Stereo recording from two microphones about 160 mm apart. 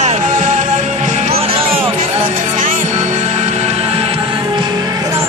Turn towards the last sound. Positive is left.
turn(degrees=-35)  # may be behind; listen again after turning